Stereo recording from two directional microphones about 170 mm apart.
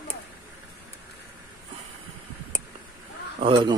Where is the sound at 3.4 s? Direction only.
30° right (ahead or behind).